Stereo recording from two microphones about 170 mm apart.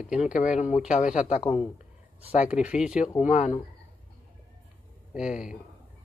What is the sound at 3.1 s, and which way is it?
Speech, 45° left (ahead or behind).